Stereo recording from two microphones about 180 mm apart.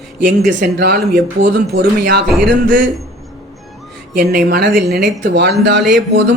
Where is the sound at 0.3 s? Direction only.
60° right (ahead or behind).